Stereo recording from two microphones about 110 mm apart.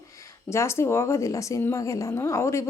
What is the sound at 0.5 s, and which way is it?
A woman's voice, 25° left (ahead or behind).